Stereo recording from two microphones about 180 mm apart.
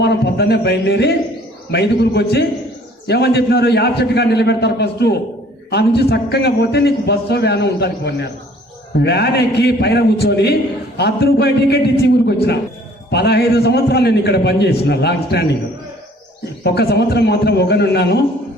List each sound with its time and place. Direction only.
0.0 s a man's voice: 65° left (ahead or behind)
16.6 s a man's voice: 65° left (ahead or behind)